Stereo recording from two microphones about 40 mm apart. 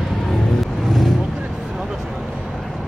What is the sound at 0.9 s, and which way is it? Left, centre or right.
Vehicle, centre.